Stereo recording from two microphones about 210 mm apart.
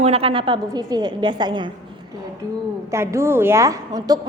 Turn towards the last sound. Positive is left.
turn(degrees=-20)  # may be behind; listen again after turning